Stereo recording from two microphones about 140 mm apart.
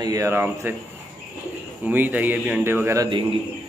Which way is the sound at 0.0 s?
25° right (ahead or behind).